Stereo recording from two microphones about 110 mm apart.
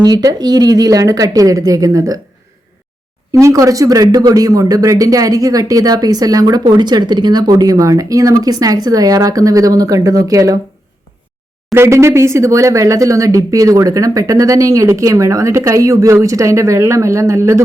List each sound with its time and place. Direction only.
0.0 s speech: 35° right (ahead or behind)
3.3 s speech: 30° right (ahead or behind)
11.7 s speech: 25° right (ahead or behind)